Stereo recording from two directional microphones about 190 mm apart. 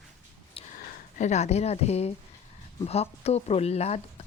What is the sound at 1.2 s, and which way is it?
Speech, 35° left (ahead or behind).